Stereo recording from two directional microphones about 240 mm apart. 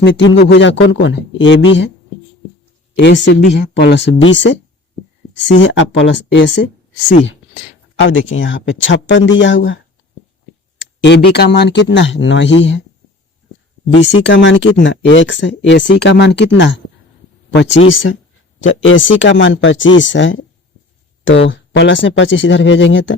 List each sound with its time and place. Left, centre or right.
0.0 s speech: left
2.9 s speech: left
11.0 s speech: left
13.9 s speech: left